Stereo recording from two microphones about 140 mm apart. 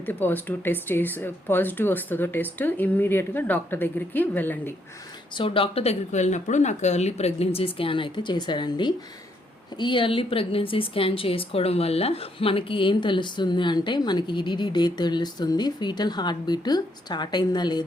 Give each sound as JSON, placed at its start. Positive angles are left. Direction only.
{"t": 0.0, "sound": "speech", "side_deg": 15}
{"t": 5.4, "sound": "a woman's voice", "side_deg": 40}